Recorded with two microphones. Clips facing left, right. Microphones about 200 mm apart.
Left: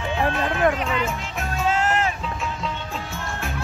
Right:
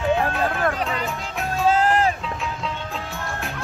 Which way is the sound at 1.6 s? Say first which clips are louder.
Right 4 dB; 35° right (ahead or behind).